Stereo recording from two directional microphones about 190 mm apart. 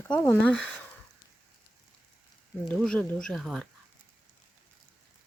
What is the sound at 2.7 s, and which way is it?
Speech, 5° left (ahead or behind).